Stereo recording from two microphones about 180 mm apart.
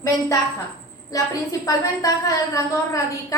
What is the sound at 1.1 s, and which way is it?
A woman's voice, 20° left (ahead or behind).